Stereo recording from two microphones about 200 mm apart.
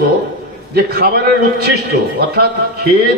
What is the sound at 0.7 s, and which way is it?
A man's voice, 50° right (ahead or behind).